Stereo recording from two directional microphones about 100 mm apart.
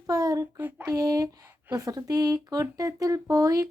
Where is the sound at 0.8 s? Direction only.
35° right (ahead or behind).